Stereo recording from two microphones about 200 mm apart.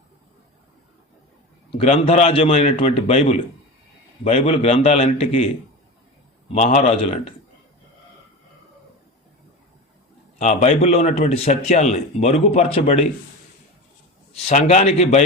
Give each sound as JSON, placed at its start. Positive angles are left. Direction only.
{"t": 1.7, "sound": "a man's voice", "side_deg": 30}
{"t": 6.5, "sound": "a man's voice", "side_deg": 35}
{"t": 10.3, "sound": "a man's voice", "side_deg": 35}
{"t": 14.3, "sound": "a man's voice", "side_deg": 30}